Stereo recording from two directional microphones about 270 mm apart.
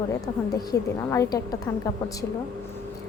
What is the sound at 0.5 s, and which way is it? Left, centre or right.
A woman's voice, centre.